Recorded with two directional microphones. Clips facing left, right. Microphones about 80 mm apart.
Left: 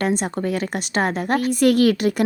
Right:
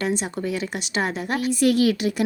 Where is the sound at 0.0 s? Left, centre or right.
Left.